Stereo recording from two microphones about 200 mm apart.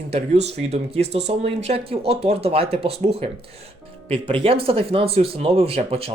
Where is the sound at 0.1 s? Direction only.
30° right (ahead or behind).